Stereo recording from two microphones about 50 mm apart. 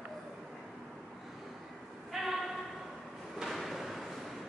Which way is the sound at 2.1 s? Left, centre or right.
Centre.